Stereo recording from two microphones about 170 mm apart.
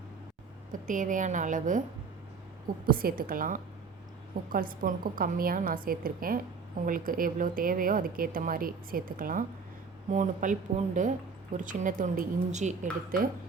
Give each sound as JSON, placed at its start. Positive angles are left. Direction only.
{"t": 0.7, "sound": "speech", "side_deg": -50}
{"t": 2.8, "sound": "a woman's voice", "side_deg": -60}